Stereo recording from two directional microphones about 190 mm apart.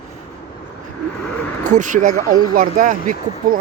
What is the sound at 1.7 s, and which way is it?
Speech, 40° right (ahead or behind).